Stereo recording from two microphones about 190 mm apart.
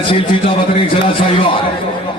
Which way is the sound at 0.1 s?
30° left (ahead or behind).